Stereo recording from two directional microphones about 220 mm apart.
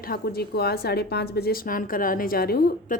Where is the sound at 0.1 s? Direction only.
45° left (ahead or behind).